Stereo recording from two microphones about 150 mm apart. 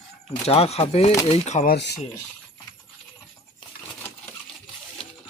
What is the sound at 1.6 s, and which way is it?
Speech, 90° left.